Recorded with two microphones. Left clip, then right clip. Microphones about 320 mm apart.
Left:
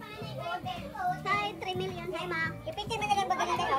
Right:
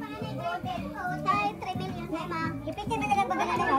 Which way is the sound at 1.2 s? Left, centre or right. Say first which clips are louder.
Right 6 dB; centre.